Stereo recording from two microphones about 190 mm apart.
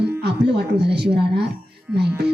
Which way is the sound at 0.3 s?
60° right (ahead or behind).